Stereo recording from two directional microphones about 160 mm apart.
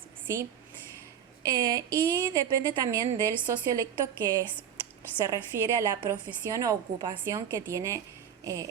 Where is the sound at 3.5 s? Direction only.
20° right (ahead or behind).